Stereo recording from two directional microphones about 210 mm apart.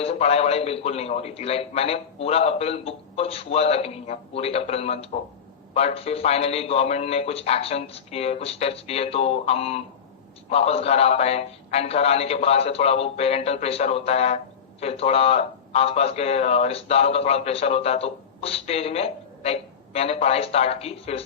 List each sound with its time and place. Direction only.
0.0 s a man's voice: 30° left (ahead or behind)